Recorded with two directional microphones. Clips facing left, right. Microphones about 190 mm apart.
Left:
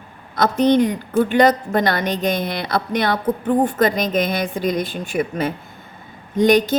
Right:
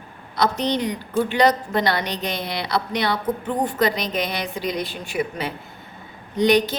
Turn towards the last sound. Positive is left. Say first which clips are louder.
# left 3 dB
turn(degrees=50)  # may be behind; listen again after turning